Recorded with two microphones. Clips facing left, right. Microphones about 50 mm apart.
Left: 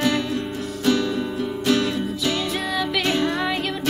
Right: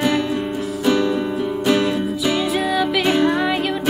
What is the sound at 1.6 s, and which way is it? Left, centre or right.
Music, centre.